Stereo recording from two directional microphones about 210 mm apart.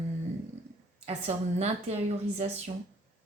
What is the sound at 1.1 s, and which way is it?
Speech, 30° right (ahead or behind).